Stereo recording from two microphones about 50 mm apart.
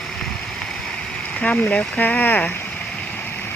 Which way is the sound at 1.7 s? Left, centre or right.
Left.